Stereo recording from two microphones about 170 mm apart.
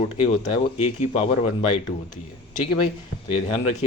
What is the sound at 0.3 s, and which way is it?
A man's voice, 35° left (ahead or behind).